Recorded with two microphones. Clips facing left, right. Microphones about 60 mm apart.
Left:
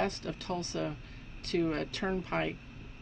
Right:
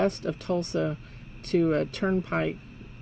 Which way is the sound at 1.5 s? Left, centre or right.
Right.